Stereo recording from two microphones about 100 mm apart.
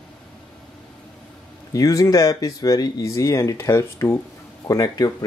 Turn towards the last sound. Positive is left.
turn(degrees=35)  # may be behind; listen again after turning